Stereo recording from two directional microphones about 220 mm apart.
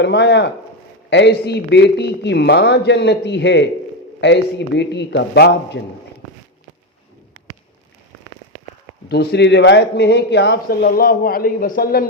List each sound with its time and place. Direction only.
0.0 s a man's voice: 50° left (ahead or behind)
9.0 s a man's voice: 50° left (ahead or behind)